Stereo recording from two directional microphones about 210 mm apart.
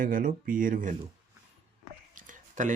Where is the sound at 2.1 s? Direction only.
35° right (ahead or behind).